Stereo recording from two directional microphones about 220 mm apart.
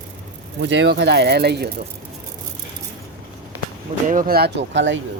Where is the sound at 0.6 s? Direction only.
55° right (ahead or behind).